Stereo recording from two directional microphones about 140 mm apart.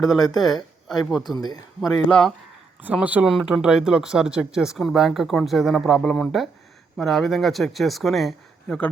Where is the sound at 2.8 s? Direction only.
10° right (ahead or behind).